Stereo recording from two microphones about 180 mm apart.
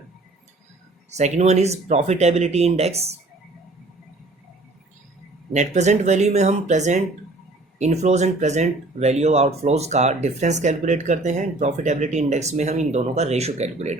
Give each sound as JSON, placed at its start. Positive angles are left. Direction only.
{"t": 1.1, "sound": "speech", "side_deg": -40}
{"t": 5.5, "sound": "speech", "side_deg": -40}